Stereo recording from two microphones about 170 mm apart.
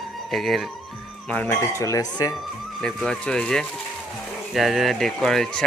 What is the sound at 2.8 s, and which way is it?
Speech, 5° left (ahead or behind).